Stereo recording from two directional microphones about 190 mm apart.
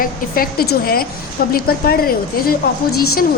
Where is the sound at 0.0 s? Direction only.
50° left (ahead or behind).